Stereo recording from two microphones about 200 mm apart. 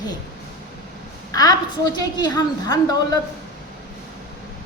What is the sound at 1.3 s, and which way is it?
A woman's voice, 20° left (ahead or behind).